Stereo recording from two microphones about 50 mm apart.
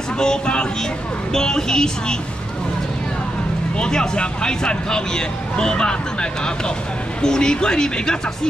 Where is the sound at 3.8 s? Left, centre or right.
Centre.